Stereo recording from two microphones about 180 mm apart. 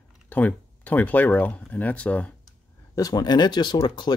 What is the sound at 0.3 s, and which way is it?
Speech, 10° left (ahead or behind).